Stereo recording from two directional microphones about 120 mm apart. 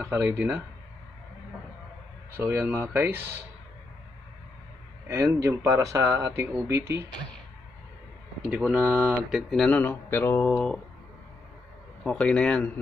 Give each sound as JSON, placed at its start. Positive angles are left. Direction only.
{"t": 0.0, "sound": "speech", "side_deg": -20}
{"t": 2.3, "sound": "speech", "side_deg": -15}
{"t": 5.0, "sound": "speech", "side_deg": -20}
{"t": 8.5, "sound": "speech", "side_deg": -10}
{"t": 9.3, "sound": "speech", "side_deg": 0}
{"t": 9.7, "sound": "mantra", "side_deg": 15}
{"t": 10.5, "sound": "speech", "side_deg": 5}
{"t": 12.0, "sound": "mantra", "side_deg": 5}